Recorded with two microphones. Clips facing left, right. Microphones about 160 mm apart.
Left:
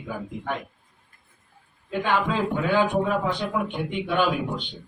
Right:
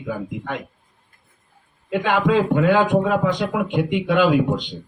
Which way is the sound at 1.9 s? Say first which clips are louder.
Right 6 dB; 90° right.